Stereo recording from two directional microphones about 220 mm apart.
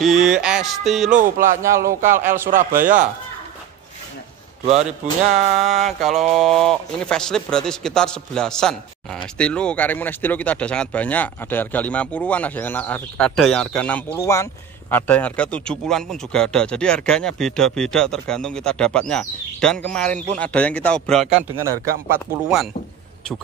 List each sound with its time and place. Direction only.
0.0 s speech: centre (ahead or behind)
1.1 s speech: 35° right (ahead or behind)
1.6 s speech: 15° right (ahead or behind)
2.0 s speech: 35° right (ahead or behind)
5.3 s speech: 30° right (ahead or behind)
5.7 s speech: centre (ahead or behind)
21.5 s speech: 15° right (ahead or behind)